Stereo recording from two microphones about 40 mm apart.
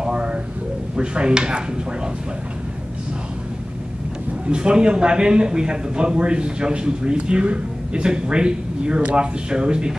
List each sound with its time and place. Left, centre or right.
0.0 s a sound: right
0.9 s speech: right
4.5 s speech: right